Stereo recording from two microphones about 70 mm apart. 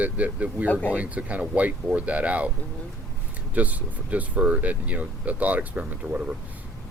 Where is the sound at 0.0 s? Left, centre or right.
Right.